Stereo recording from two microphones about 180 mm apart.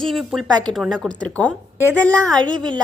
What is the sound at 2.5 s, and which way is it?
Speech, 25° right (ahead or behind).